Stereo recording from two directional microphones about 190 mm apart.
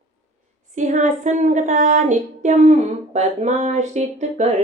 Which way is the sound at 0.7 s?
40° right (ahead or behind).